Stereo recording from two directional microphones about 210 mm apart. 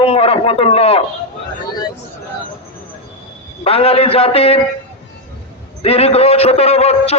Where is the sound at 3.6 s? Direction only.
30° left (ahead or behind).